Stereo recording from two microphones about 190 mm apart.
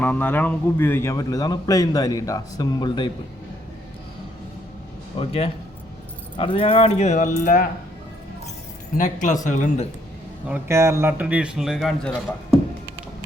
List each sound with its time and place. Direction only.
0.0 s a man's voice: 10° left (ahead or behind)
5.1 s a man's voice: 30° left (ahead or behind)
9.0 s speech: 40° left (ahead or behind)
10.5 s a man's voice: 15° right (ahead or behind); by 12.2 s 5° left (ahead or behind)